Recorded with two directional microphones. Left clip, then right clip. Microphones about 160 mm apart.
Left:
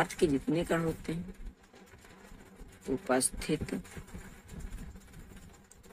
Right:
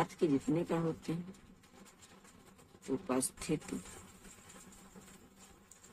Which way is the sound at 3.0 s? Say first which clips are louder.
Left 8 dB; 15° left (ahead or behind).